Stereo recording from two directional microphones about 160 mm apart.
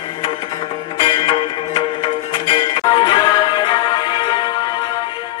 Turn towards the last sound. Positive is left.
turn(degrees=30)  # may be behind; listen again after turning